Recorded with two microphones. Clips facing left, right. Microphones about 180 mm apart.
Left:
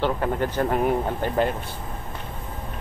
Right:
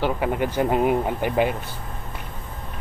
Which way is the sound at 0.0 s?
10° right (ahead or behind).